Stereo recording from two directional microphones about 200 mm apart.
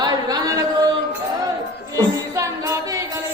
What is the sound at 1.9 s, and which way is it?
Music, 15° right (ahead or behind).